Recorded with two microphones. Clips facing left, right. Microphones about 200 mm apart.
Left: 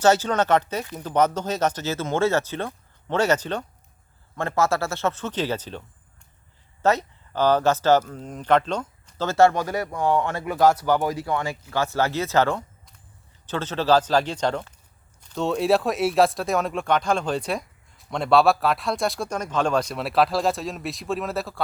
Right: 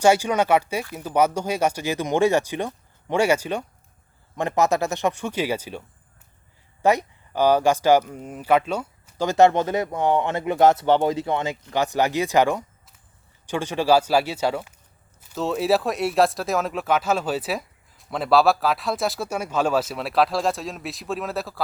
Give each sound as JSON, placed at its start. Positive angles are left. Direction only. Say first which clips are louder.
{"t": 0.0, "sound": "speech", "louder": "right 1 dB", "side_deg": -10}
{"t": 6.8, "sound": "speech", "louder": "right 2 dB", "side_deg": -15}